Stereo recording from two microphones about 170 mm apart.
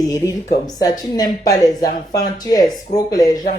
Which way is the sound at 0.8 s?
20° left (ahead or behind).